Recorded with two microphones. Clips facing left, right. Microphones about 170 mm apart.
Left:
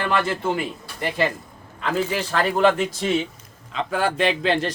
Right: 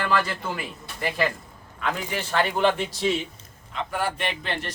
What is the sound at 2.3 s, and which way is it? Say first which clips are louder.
Speech: left 2 dB; 40° left (ahead or behind).